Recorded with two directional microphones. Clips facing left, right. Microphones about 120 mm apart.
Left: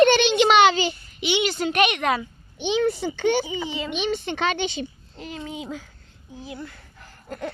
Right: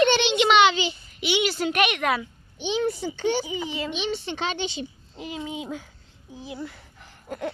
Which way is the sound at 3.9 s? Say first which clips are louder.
Left 3 dB; 55° left (ahead or behind).